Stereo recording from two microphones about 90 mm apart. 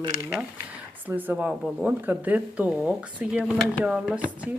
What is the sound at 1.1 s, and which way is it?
Speech, 20° right (ahead or behind).